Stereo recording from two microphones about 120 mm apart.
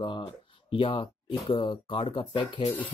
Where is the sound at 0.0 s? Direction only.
45° left (ahead or behind).